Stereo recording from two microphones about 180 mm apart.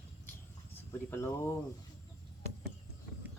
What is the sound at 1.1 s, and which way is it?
Speech, 15° left (ahead or behind).